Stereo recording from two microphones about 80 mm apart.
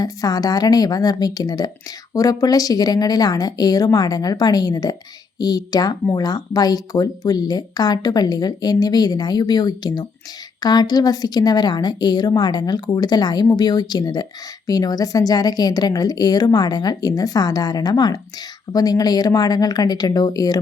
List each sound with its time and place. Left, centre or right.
0.0 s speech: left